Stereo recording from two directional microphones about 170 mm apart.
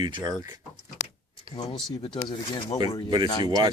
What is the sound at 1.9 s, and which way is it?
Speech, 25° left (ahead or behind).